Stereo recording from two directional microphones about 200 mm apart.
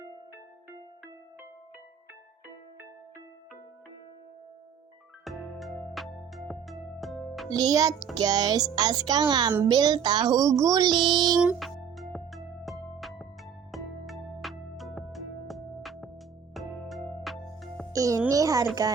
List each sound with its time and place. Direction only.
5.2 s music: centre (ahead or behind)
7.5 s speech: 20° right (ahead or behind)
8.1 s music: 20° right (ahead or behind)
11.3 s music: centre (ahead or behind)
17.9 s a child's voice: 15° right (ahead or behind)